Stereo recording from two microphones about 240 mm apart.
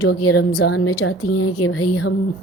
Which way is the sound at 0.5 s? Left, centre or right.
Left.